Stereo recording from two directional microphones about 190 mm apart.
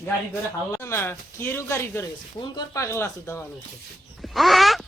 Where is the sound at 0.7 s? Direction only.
15° left (ahead or behind).